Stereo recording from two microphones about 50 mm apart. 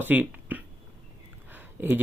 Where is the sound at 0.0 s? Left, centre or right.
Right.